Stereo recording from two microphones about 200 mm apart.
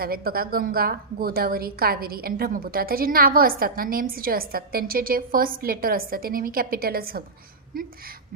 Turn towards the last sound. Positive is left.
turn(degrees=-45)  # may be behind; listen again after turning